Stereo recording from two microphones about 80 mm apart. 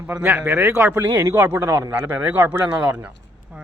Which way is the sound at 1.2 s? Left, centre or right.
Right.